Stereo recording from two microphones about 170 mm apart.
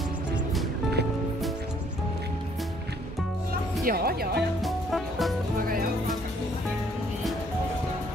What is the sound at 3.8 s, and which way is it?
Speech, 65° right (ahead or behind).